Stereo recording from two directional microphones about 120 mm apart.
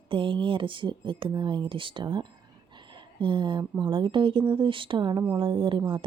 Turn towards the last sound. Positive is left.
turn(degrees=-45)  # may be behind; listen again after turning